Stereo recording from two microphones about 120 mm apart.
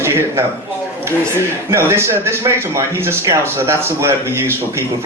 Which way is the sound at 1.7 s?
20° right (ahead or behind).